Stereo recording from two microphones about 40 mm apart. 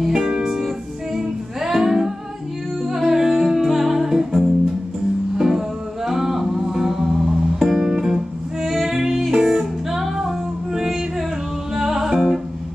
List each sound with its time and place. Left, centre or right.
0.0 s music: centre
5.4 s music: centre
8.6 s female singing: centre
9.0 s music: centre